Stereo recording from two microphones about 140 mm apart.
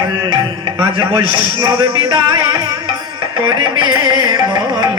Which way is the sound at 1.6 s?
35° right (ahead or behind).